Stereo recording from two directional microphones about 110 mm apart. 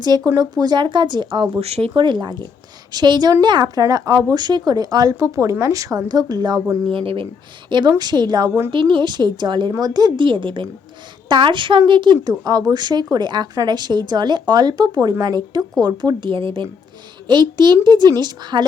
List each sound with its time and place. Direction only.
0.3 s speech: 35° right (ahead or behind)
1.6 s speech: 65° right (ahead or behind)
1.9 s speech: 45° right (ahead or behind)
6.9 s speech: 55° right (ahead or behind)
7.7 s speech: 40° right (ahead or behind)